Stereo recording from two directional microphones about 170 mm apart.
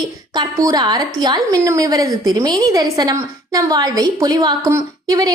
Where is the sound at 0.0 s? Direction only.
25° right (ahead or behind).